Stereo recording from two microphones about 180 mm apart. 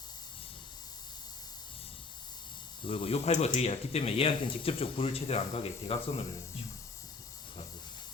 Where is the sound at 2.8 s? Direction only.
30° left (ahead or behind).